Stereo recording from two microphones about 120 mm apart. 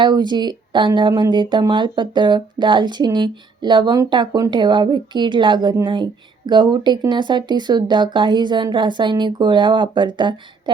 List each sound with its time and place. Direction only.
0.0 s speech: 40° right (ahead or behind)